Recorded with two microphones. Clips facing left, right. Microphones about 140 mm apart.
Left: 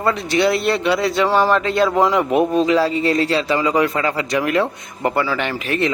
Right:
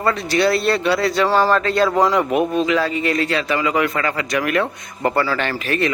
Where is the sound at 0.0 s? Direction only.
20° left (ahead or behind).